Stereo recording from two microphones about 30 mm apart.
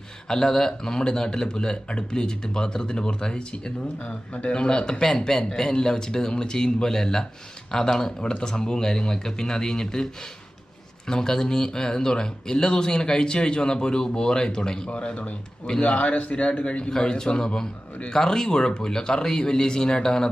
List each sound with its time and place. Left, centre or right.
0.3 s speech: left
11.1 s speech: left
14.9 s a man's voice: left
17.0 s speech: left